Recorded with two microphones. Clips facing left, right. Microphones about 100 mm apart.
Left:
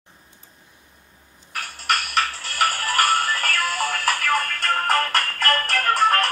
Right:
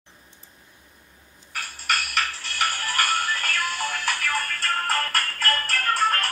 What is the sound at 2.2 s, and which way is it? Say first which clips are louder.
Music: left 5 dB; 40° left (ahead or behind).